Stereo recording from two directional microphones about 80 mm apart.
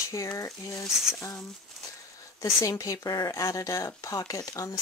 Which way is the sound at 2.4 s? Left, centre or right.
Left.